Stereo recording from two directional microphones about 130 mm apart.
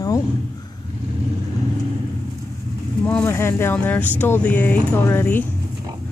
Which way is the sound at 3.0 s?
15° left (ahead or behind).